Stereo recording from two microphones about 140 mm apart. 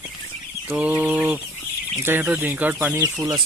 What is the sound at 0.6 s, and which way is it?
Speech, 10° right (ahead or behind).